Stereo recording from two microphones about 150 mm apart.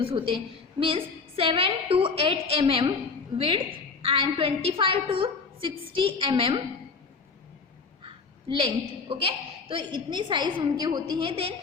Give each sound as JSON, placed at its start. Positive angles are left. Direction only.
{"t": 0.0, "sound": "a woman's voice", "side_deg": -40}
{"t": 8.0, "sound": "a woman's voice", "side_deg": -35}